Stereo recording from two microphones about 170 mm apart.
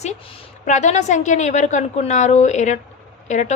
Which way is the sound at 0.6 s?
45° left (ahead or behind).